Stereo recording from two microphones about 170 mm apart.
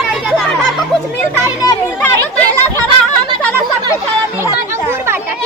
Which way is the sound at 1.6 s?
20° left (ahead or behind).